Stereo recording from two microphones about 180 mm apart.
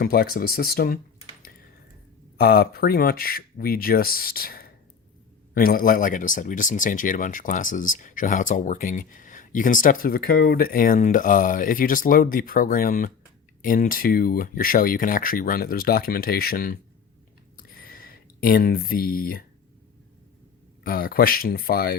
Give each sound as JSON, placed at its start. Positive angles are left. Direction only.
{"t": 0.0, "sound": "speech", "side_deg": 55}
{"t": 2.4, "sound": "speech", "side_deg": 55}
{"t": 17.6, "sound": "a sound", "side_deg": 55}
{"t": 20.8, "sound": "speech", "side_deg": 55}